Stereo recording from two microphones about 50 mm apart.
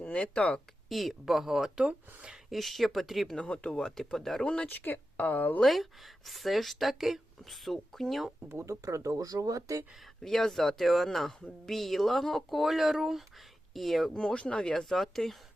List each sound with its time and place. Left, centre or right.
0.0 s speech: left
0.9 s speech: centre
2.5 s speech: centre
3.3 s speech: left
3.8 s speech: centre
4.7 s speech: left
5.6 s speech: centre
8.4 s speech: right
10.2 s speech: centre
14.1 s speech: centre